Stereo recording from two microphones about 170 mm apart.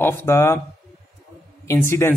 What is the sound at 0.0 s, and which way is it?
Speech, 15° left (ahead or behind).